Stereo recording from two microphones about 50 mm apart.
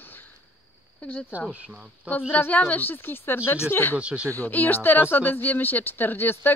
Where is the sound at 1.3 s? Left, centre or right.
Right.